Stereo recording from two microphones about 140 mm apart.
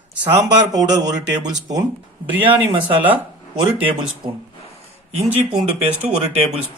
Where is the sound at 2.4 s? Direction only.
40° right (ahead or behind).